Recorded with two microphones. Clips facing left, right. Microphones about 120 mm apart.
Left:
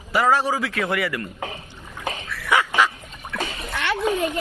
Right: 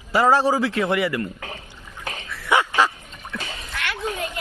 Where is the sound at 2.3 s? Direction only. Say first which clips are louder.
Right 1 dB; 25° right (ahead or behind).